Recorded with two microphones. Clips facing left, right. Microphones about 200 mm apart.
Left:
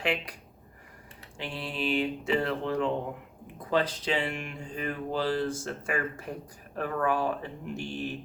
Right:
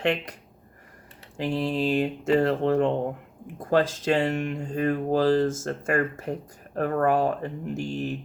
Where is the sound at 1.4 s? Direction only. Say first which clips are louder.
Right 9 dB; 40° right (ahead or behind).